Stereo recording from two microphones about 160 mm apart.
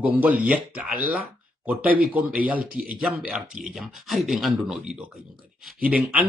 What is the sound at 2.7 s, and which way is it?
Speech, 65° right (ahead or behind).